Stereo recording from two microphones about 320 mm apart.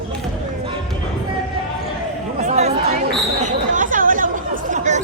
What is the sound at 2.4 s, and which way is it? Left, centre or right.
Chatter, right.